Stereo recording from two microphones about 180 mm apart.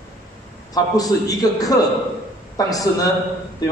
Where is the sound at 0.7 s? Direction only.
20° left (ahead or behind).